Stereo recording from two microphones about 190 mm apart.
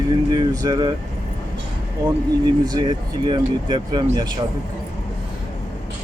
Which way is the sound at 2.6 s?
25° right (ahead or behind).